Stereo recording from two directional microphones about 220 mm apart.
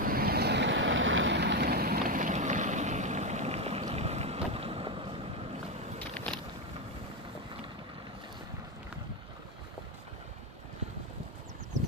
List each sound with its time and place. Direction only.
0.0 s vehicle: 45° right (ahead or behind); by 5.1 s 25° right (ahead or behind)
6.1 s vehicle: 5° left (ahead or behind)